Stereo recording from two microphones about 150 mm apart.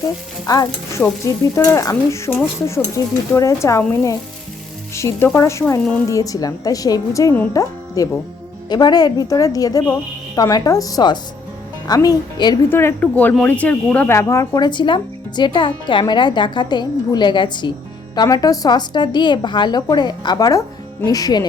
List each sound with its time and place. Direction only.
0.4 s speech: 25° left (ahead or behind)
4.9 s speech: 20° left (ahead or behind)
12.7 s speech: 10° left (ahead or behind)